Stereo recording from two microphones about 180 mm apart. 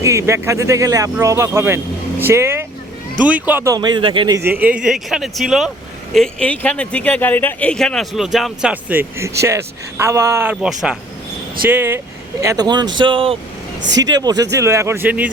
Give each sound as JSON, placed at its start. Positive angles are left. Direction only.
{"t": 0.0, "sound": "speech", "side_deg": -15}
{"t": 4.4, "sound": "speech", "side_deg": -10}
{"t": 13.9, "sound": "speech", "side_deg": -20}